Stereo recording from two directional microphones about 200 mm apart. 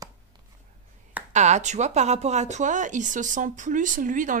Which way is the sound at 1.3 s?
35° right (ahead or behind).